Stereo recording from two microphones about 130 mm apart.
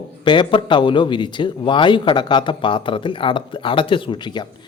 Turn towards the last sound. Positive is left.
turn(degrees=35)  # may be behind; listen again after turning